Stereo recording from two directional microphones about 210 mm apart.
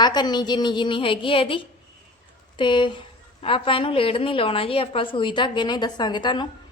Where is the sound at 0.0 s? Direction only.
20° left (ahead or behind).